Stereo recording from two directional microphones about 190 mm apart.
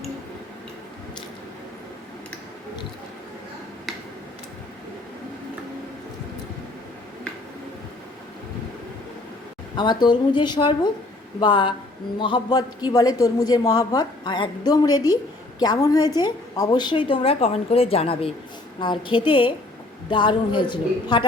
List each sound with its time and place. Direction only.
9.7 s speech: 25° left (ahead or behind)